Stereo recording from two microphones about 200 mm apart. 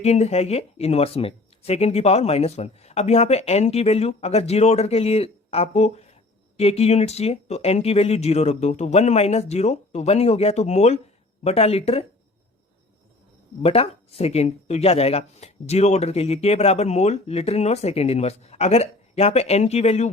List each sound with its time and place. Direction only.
0.0 s speech: 30° left (ahead or behind)
13.6 s speech: 30° left (ahead or behind)